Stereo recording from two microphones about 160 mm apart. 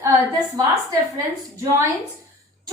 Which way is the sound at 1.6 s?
15° right (ahead or behind).